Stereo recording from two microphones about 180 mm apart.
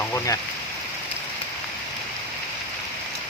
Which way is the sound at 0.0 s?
15° left (ahead or behind).